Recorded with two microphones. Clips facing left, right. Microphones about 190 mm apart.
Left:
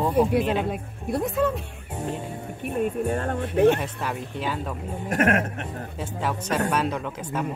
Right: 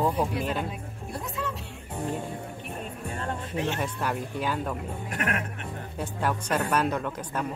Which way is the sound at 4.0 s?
Centre (ahead or behind).